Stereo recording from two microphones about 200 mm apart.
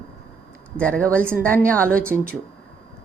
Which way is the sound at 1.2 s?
10° right (ahead or behind).